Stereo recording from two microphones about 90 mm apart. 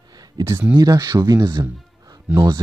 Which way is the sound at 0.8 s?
45° right (ahead or behind).